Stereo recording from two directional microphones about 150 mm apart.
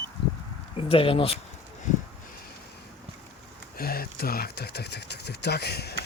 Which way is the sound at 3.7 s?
90° left.